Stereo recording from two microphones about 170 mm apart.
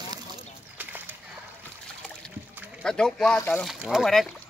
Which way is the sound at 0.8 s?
10° right (ahead or behind).